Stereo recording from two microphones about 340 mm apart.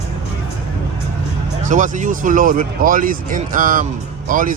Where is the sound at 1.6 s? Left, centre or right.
Right.